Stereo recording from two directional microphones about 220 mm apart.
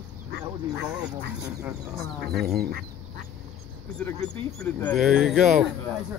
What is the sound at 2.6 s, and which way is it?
Speech, 45° right (ahead or behind).